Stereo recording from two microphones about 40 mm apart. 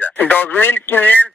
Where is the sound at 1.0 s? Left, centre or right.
Left.